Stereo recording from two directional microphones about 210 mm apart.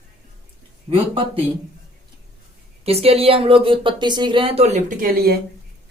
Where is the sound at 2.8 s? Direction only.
30° right (ahead or behind).